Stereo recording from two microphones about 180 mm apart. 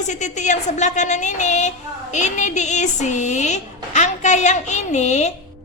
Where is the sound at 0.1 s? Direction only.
40° left (ahead or behind).